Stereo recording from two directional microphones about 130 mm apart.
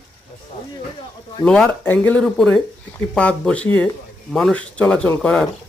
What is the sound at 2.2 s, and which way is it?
Speech, 5° left (ahead or behind).